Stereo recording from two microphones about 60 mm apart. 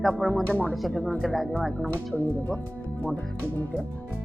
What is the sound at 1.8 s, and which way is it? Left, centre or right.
Speech, left.